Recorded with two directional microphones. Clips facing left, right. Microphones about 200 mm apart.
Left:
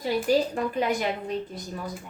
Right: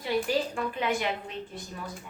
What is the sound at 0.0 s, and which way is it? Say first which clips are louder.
A woman's voice: left 4 dB; 40° left (ahead or behind).